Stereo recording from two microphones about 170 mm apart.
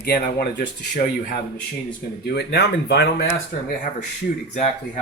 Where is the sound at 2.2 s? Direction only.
75° left (ahead or behind).